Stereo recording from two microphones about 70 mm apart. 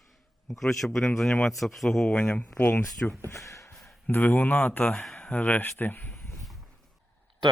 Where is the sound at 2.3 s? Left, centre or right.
Left.